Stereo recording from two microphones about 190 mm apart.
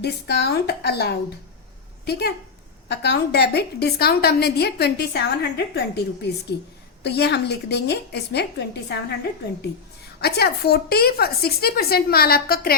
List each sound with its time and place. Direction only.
0.0 s a woman's voice: 60° left (ahead or behind)
7.0 s a woman's voice: 60° left (ahead or behind)
10.2 s a woman's voice: 55° left (ahead or behind)